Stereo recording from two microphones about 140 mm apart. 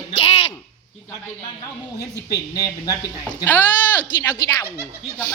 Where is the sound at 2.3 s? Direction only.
25° left (ahead or behind).